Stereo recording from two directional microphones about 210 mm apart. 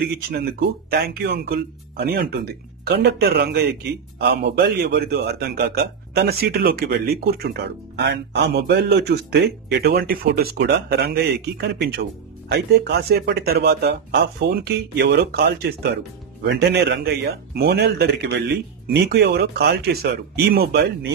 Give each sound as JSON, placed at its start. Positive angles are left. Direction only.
{"t": 0.3, "sound": "a man's voice", "side_deg": -50}